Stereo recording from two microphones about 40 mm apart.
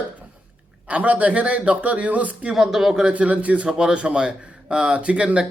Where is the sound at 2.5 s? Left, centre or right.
Centre.